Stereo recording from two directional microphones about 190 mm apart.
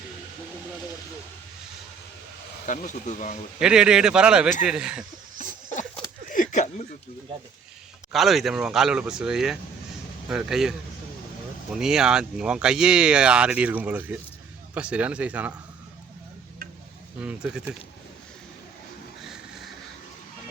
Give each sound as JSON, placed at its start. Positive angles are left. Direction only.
{"t": 2.6, "sound": "speech", "side_deg": 40}
{"t": 3.6, "sound": "speech", "side_deg": -5}
{"t": 6.3, "sound": "a sound", "side_deg": 40}
{"t": 8.1, "sound": "speech", "side_deg": 0}
{"t": 11.8, "sound": "speech", "side_deg": -5}
{"t": 17.2, "sound": "speech", "side_deg": -5}
{"t": 19.2, "sound": "train", "side_deg": 0}